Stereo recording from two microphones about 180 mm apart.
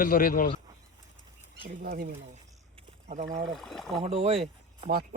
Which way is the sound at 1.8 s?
55° right (ahead or behind).